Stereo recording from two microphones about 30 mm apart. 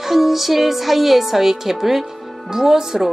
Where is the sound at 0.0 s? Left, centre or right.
Centre.